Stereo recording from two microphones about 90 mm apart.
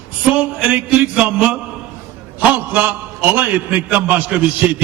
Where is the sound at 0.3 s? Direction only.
15° right (ahead or behind).